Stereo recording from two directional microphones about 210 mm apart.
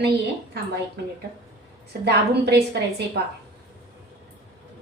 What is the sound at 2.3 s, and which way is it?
Speech, 50° right (ahead or behind).